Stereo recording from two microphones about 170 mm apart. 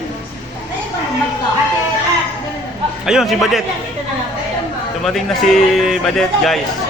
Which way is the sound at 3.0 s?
5° right (ahead or behind).